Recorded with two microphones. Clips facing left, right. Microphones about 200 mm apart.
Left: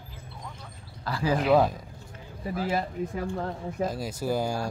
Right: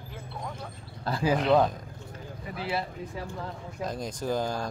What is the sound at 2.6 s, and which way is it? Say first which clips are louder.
Speech: left 4 dB; 45° left (ahead or behind).